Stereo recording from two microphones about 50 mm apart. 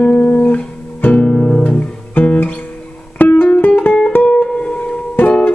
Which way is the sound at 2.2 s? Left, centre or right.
Left.